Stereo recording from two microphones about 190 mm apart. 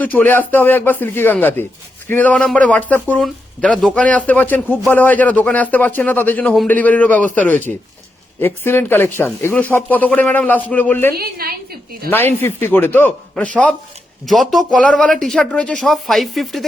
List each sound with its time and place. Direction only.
0.0 s speech: 10° left (ahead or behind)
11.2 s a woman's voice: 55° right (ahead or behind)
12.1 s speech: 10° left (ahead or behind)